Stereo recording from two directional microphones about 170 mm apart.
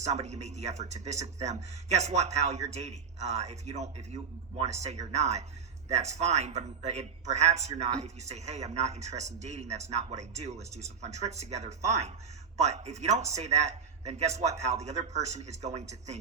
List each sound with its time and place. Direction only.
0.0 s a man's voice: 40° right (ahead or behind)